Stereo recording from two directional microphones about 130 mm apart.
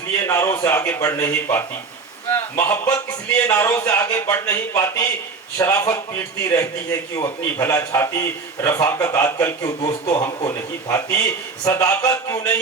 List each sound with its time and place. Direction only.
0.3 s a man's voice: 20° left (ahead or behind)
2.6 s a man's voice: 20° left (ahead or behind)
9.6 s a man's voice: 30° left (ahead or behind)